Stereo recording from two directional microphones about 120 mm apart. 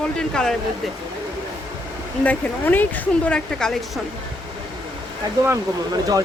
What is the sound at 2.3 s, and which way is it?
Speech, 15° left (ahead or behind).